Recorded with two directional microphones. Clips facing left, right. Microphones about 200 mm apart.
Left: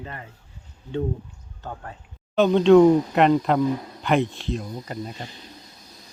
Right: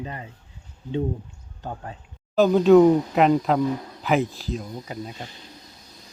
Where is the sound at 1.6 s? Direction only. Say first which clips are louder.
Right 2 dB; 15° right (ahead or behind).